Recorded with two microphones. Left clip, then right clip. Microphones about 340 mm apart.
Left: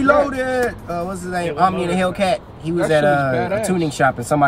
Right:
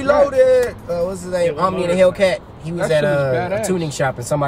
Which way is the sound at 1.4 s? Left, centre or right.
Centre.